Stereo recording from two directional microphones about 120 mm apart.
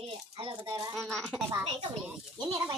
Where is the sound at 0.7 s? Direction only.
35° right (ahead or behind).